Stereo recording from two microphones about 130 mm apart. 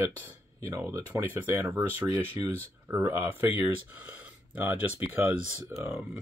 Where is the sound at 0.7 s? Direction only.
25° right (ahead or behind).